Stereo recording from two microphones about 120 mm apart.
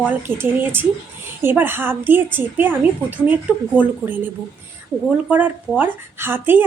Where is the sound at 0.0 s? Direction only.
15° right (ahead or behind).